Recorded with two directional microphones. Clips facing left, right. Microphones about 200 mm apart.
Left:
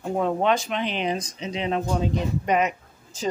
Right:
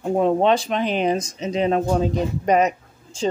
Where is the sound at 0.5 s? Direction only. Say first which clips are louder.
Right 5 dB; 35° right (ahead or behind).